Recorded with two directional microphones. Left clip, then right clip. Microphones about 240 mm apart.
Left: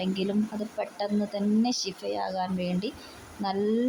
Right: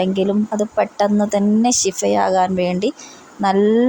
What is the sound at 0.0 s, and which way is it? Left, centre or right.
Speech, right.